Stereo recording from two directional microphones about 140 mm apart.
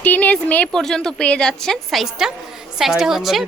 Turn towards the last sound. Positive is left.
turn(degrees=0)  # may be behind; listen again after turning